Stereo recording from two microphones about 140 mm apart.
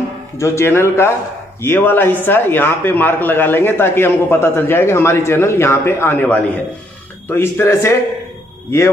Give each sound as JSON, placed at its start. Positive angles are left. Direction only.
{"t": 0.4, "sound": "speech", "side_deg": 20}